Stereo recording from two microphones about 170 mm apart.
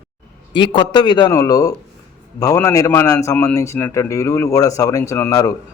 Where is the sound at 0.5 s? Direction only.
30° left (ahead or behind).